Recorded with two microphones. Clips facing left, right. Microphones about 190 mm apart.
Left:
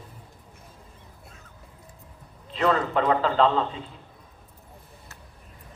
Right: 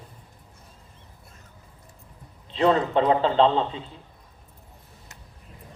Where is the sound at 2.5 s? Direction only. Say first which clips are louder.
Right 3 dB; 30° right (ahead or behind).